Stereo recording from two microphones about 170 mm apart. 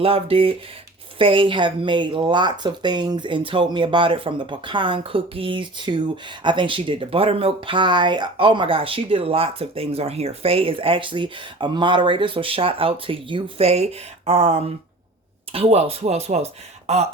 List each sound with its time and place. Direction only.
0.0 s speech: 35° right (ahead or behind)